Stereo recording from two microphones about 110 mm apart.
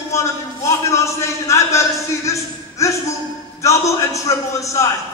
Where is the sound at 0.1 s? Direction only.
25° left (ahead or behind).